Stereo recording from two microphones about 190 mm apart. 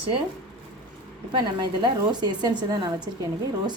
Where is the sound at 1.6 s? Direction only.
25° right (ahead or behind).